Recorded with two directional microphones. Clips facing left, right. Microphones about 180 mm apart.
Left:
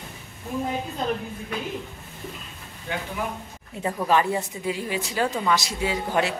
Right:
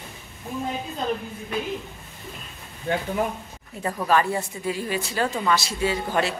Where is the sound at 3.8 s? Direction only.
15° left (ahead or behind).